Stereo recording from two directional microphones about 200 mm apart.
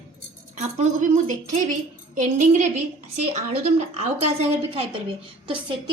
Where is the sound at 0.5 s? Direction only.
35° right (ahead or behind).